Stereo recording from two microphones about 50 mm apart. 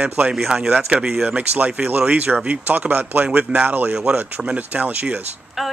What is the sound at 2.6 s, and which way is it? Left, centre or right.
Speech, right.